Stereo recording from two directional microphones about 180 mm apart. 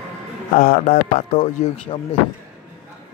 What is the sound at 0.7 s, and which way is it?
Speech, 45° left (ahead or behind).